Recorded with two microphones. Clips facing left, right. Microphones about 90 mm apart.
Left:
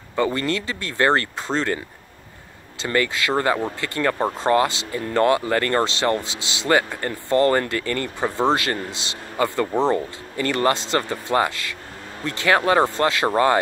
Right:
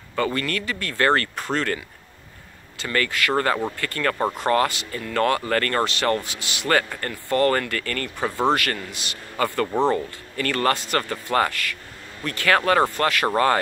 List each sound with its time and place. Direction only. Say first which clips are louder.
0.1 s speech: left 3 dB; 20° left (ahead or behind)
2.8 s speech: left 2 dB; 20° left (ahead or behind)